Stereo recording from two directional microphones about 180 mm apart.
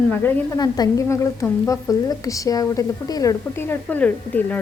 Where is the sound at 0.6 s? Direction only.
20° left (ahead or behind).